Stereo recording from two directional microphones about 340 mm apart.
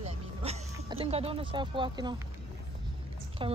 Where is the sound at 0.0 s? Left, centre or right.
Centre.